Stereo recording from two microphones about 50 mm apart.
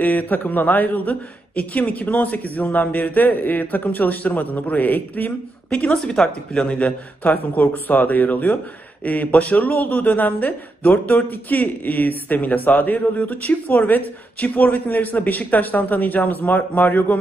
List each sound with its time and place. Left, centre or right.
0.0 s a man's voice: left
5.7 s a man's voice: left